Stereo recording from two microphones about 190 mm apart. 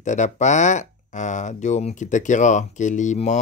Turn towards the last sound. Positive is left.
turn(degrees=40)  # may be behind; listen again after turning